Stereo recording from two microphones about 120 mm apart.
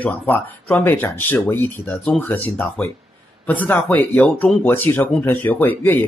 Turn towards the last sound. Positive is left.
turn(degrees=15)  # may be behind; listen again after turning